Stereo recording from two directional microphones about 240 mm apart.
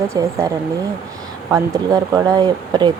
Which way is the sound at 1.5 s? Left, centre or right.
Centre.